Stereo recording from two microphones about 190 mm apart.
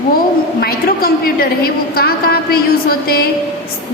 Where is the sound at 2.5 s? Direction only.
55° left (ahead or behind).